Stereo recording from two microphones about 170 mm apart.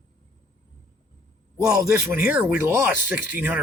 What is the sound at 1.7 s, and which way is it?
Speech, 15° right (ahead or behind).